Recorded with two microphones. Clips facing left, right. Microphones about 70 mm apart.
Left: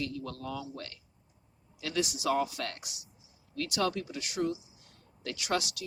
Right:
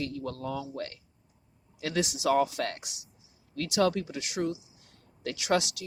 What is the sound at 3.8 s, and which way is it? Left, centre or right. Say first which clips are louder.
Speech: right 6 dB; right.